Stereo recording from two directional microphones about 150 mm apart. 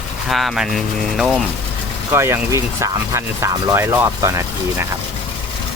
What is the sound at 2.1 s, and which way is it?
Speech, 20° right (ahead or behind).